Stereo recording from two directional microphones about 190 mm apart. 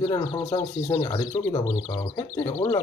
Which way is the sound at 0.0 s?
20° left (ahead or behind).